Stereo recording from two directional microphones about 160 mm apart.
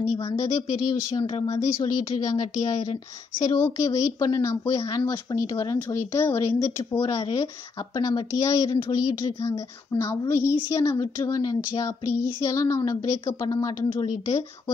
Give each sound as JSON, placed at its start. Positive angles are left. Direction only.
{"t": 0.2, "sound": "a woman's voice", "side_deg": 20}
{"t": 1.2, "sound": "speech", "side_deg": 35}
{"t": 1.5, "sound": "a woman's voice", "side_deg": 20}